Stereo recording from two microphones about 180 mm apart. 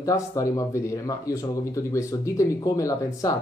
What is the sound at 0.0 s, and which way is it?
Speech, 20° left (ahead or behind).